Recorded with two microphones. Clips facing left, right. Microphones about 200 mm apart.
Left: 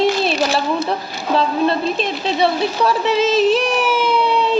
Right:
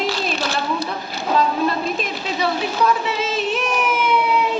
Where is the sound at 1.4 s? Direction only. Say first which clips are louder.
Left 3 dB; 30° left (ahead or behind).